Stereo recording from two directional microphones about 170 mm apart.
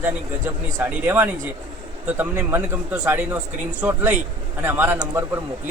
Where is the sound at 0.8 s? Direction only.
10° right (ahead or behind).